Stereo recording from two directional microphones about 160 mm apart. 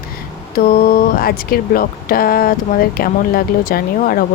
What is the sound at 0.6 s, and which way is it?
Speech, 65° left (ahead or behind).